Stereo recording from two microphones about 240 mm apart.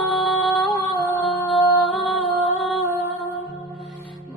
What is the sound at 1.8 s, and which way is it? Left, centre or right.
Music, centre.